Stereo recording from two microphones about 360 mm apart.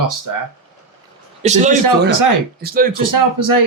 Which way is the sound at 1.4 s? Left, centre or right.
Centre.